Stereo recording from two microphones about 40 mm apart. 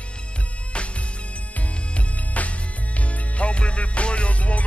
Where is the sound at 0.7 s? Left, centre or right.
Left.